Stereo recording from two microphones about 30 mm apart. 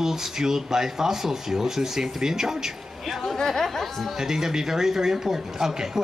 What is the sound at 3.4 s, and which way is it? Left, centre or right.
Speech, centre.